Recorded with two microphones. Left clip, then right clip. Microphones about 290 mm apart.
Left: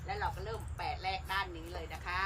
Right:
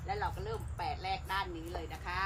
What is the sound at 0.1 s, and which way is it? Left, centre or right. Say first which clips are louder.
Speech: right 1 dB; centre.